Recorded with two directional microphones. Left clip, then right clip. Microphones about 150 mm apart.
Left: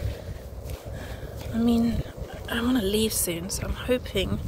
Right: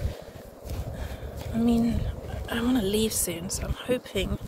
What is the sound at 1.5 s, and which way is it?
Speech, 10° left (ahead or behind).